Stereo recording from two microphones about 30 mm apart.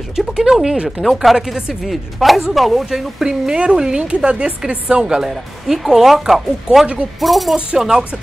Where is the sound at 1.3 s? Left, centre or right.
Centre.